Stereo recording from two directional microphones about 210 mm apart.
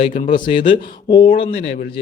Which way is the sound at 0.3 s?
25° left (ahead or behind).